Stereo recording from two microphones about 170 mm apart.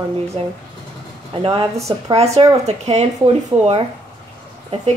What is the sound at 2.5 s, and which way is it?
Speech, 40° right (ahead or behind).